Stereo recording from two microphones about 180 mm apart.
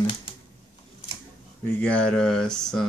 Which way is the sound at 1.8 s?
5° left (ahead or behind).